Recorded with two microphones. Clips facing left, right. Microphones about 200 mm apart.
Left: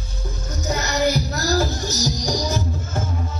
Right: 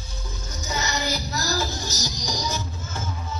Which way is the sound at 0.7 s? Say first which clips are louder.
Left 7 dB; 55° left (ahead or behind).